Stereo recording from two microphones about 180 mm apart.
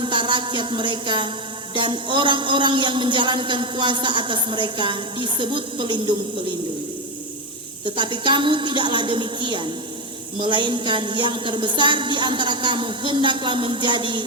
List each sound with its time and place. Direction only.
0.0 s music: 25° right (ahead or behind)
1.7 s a woman's voice: 25° right (ahead or behind)
7.9 s a woman's voice: 25° right (ahead or behind)